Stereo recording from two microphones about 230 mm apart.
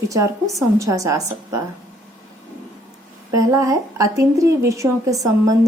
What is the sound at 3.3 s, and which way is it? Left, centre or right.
A woman's voice, centre.